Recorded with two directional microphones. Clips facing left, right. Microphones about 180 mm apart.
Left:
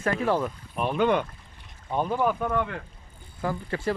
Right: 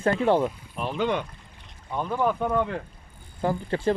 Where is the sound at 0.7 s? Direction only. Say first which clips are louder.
Left 3 dB; 55° left (ahead or behind).